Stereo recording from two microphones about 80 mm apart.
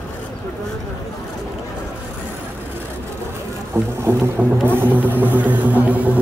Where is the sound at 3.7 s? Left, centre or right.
Right.